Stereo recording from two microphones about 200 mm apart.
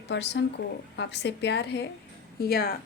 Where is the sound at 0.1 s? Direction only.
65° left (ahead or behind).